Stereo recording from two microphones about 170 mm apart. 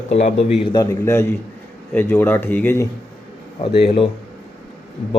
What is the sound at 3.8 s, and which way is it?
Speech, 30° left (ahead or behind).